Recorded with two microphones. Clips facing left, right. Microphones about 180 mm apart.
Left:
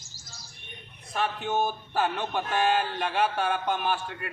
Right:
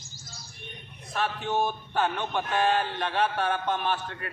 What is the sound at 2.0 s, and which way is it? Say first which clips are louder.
A man's voice: even; 5° left (ahead or behind).